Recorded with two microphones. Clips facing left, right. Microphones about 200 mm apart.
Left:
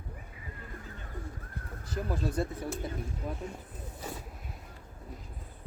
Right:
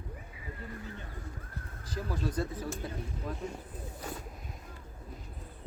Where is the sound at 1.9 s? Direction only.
25° left (ahead or behind).